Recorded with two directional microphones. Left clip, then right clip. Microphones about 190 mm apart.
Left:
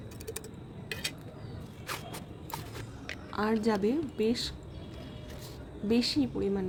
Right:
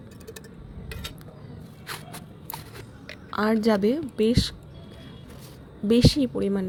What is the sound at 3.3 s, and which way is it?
A woman's voice, 30° right (ahead or behind).